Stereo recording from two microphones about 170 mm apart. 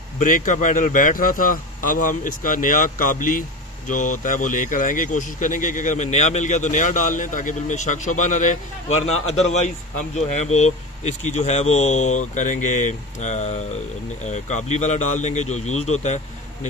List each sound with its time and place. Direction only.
0.2 s speech: 50° left (ahead or behind)